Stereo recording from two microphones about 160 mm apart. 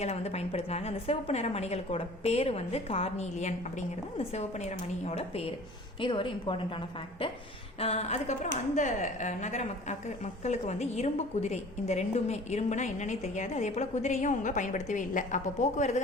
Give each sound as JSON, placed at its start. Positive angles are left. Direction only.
{"t": 0.0, "sound": "a woman's voice", "side_deg": 40}
{"t": 7.8, "sound": "a woman's voice", "side_deg": 40}